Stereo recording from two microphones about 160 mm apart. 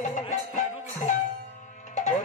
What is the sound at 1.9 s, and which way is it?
Music, 45° left (ahead or behind).